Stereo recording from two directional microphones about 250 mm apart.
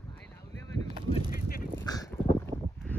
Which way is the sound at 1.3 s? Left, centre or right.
Left.